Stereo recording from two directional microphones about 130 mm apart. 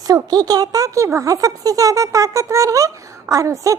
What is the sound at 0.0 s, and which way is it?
A woman's voice, 30° right (ahead or behind).